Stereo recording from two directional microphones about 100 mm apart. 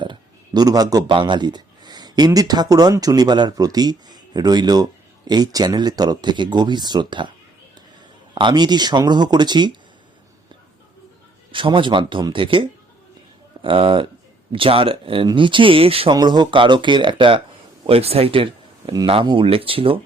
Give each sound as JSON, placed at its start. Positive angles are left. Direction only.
{"t": 0.0, "sound": "a sound", "side_deg": -45}
{"t": 1.1, "sound": "speech", "side_deg": -50}
{"t": 8.4, "sound": "speech", "side_deg": -50}
{"t": 11.5, "sound": "speech", "side_deg": -55}
{"t": 16.1, "sound": "speech", "side_deg": -45}
{"t": 17.8, "sound": "speech", "side_deg": -80}
{"t": 18.9, "sound": "speech", "side_deg": -55}
{"t": 19.5, "sound": "speech", "side_deg": -70}